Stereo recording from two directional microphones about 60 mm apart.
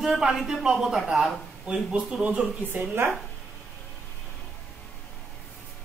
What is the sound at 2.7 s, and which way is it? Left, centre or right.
Speech, right.